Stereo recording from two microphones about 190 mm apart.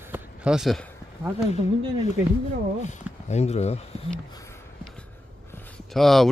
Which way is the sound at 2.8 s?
35° left (ahead or behind).